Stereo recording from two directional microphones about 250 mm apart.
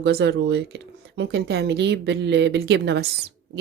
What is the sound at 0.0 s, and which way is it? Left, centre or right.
Speech, right.